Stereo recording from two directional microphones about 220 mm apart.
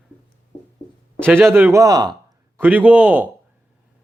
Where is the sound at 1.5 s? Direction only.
10° right (ahead or behind).